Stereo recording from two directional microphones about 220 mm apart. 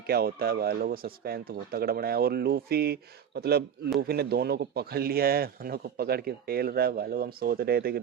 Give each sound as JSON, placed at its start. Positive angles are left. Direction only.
{"t": 0.1, "sound": "speech", "side_deg": -45}